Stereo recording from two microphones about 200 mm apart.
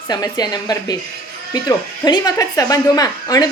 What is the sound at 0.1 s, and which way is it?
A woman's voice, 20° left (ahead or behind).